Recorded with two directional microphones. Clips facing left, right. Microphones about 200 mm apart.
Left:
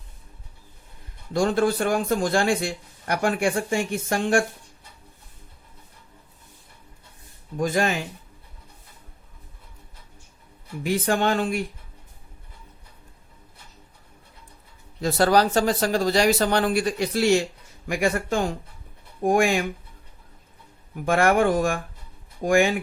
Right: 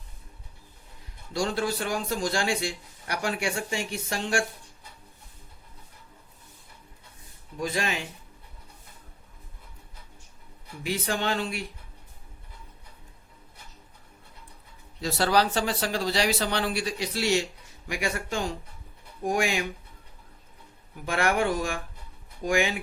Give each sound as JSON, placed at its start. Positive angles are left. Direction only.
{"t": 1.3, "sound": "a man's voice", "side_deg": 50}
{"t": 7.5, "sound": "a man's voice", "side_deg": 50}
{"t": 10.8, "sound": "a man's voice", "side_deg": 50}
{"t": 15.0, "sound": "a man's voice", "side_deg": 45}
{"t": 20.9, "sound": "a man's voice", "side_deg": 50}